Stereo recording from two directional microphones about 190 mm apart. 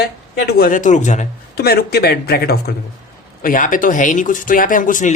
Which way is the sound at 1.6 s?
55° left (ahead or behind).